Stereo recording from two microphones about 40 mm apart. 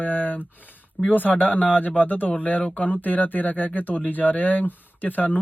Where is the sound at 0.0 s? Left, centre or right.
Left.